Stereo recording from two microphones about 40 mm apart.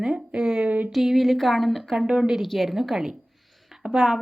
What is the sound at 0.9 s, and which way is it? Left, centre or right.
A woman's voice, centre.